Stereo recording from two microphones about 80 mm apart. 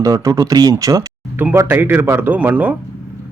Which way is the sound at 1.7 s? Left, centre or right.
Right.